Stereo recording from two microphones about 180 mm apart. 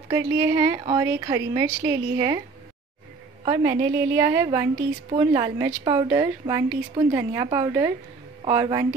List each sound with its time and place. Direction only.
0.1 s a woman's voice: 20° right (ahead or behind)
3.4 s a woman's voice: 20° right (ahead or behind)